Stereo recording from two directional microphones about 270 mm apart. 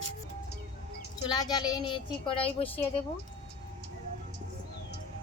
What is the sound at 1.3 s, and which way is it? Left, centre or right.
A woman's voice, centre.